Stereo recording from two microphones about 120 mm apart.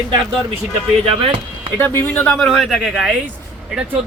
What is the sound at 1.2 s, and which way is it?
Speech, 40° right (ahead or behind).